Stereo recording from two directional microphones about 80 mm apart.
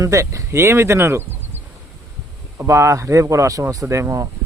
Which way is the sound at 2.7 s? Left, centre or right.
Right.